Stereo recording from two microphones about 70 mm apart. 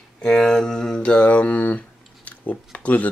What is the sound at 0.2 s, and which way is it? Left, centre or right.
Mantra, centre.